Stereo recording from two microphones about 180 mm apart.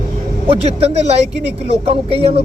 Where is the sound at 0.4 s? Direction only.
35° right (ahead or behind).